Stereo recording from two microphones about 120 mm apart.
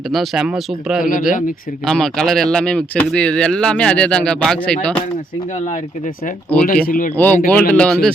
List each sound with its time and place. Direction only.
0.1 s speech: centre (ahead or behind)
5.5 s speech: 90° left
6.5 s speech: 10° left (ahead or behind)